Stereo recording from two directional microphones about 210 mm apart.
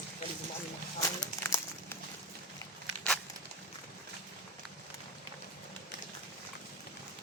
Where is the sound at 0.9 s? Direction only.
15° left (ahead or behind).